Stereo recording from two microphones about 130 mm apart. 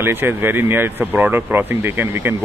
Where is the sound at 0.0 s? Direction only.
15° right (ahead or behind).